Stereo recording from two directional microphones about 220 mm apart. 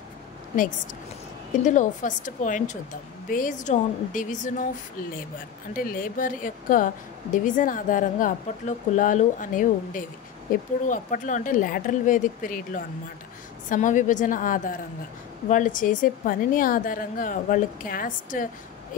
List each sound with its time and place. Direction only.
1.6 s a woman's voice: 35° left (ahead or behind)
5.7 s a woman's voice: 40° left (ahead or behind)